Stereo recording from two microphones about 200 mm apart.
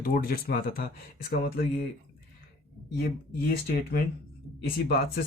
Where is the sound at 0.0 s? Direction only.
45° left (ahead or behind).